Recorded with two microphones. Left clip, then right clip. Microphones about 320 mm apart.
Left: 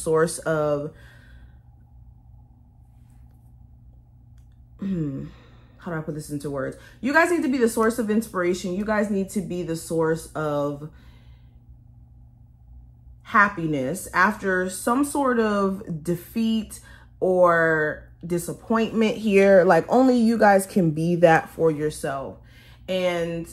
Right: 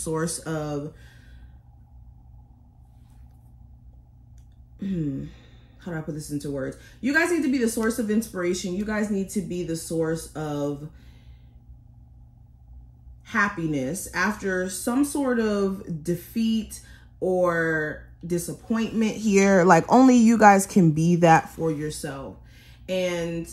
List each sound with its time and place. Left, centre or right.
0.0 s speech: centre
4.7 s speech: centre
13.2 s speech: centre
20.8 s speech: centre